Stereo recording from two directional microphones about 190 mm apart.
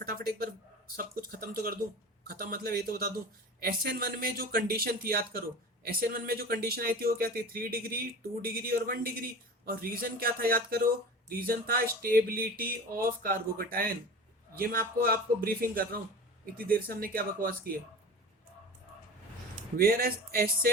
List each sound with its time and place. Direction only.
0.0 s a man's voice: 55° right (ahead or behind)
19.7 s speech: 50° right (ahead or behind)